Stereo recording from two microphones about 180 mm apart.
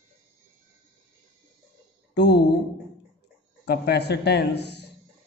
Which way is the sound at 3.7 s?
65° left (ahead or behind).